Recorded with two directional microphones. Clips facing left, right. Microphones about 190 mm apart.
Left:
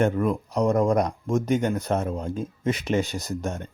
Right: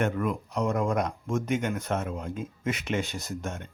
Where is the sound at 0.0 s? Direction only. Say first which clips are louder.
Left 5 dB; 35° left (ahead or behind).